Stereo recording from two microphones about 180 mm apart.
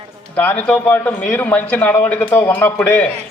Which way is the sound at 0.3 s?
10° left (ahead or behind).